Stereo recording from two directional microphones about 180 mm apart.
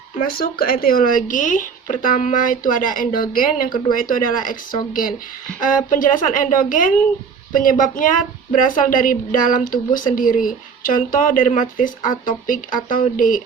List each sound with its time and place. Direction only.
0.2 s a woman's voice: 55° left (ahead or behind)